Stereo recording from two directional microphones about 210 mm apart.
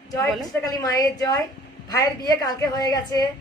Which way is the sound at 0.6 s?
15° left (ahead or behind).